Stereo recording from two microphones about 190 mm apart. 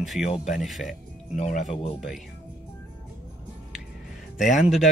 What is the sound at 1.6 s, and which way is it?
Speech, 30° left (ahead or behind).